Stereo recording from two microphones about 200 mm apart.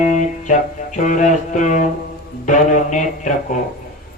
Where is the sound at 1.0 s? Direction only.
40° left (ahead or behind).